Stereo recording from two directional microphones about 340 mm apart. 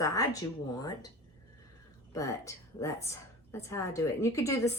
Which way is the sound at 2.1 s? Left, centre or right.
Centre.